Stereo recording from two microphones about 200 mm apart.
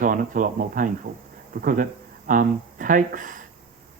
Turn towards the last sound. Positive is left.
turn(degrees=-40)  # may be behind; listen again after turning